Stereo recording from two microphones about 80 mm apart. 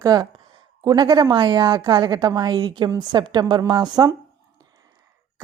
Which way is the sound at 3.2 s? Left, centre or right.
Right.